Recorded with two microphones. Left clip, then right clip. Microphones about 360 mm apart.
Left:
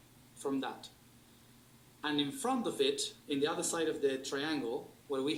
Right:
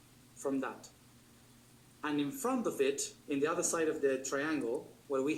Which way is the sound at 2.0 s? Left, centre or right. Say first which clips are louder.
Left 1 dB; centre.